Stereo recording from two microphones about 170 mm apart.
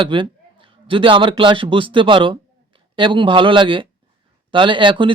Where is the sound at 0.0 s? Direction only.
30° right (ahead or behind).